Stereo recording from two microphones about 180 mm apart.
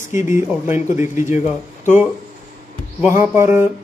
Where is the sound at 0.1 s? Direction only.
15° right (ahead or behind).